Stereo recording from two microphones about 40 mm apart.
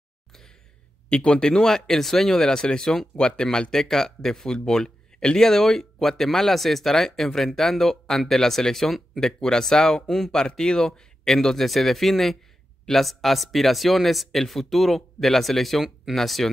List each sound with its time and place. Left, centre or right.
0.3 s a sound: centre
1.0 s speech: left; by 3.1 s centre
3.2 s speech: left
3.7 s speech: centre
10.0 s speech: centre